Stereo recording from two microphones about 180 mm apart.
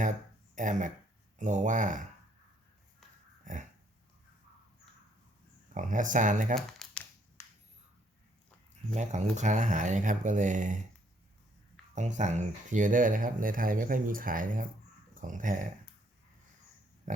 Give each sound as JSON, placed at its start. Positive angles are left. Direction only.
{"t": 0.5, "sound": "speech", "side_deg": -45}
{"t": 3.4, "sound": "pig", "side_deg": -45}
{"t": 5.7, "sound": "speech", "side_deg": -45}
{"t": 6.6, "sound": "crumpling", "side_deg": 0}
{"t": 8.9, "sound": "speech", "side_deg": -40}
{"t": 11.9, "sound": "speech", "side_deg": -40}